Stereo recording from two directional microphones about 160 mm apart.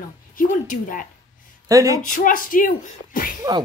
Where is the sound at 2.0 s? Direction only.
60° left (ahead or behind).